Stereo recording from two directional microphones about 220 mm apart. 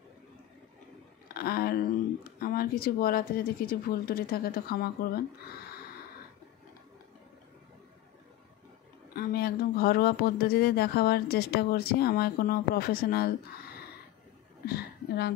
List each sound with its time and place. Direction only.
1.3 s a sound: 45° left (ahead or behind)
2.4 s speech: 45° left (ahead or behind)
9.1 s speech: 45° left (ahead or behind)
14.7 s a woman's voice: 45° left (ahead or behind)